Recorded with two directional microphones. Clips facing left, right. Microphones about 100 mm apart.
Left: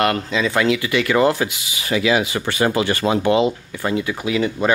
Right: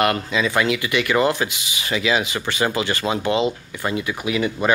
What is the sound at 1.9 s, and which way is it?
Speech, 55° left (ahead or behind).